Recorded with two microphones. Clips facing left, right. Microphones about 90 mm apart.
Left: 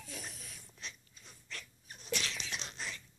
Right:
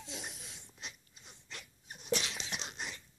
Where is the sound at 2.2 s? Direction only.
20° right (ahead or behind).